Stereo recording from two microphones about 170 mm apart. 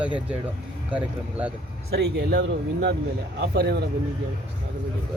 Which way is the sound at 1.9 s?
75° right (ahead or behind).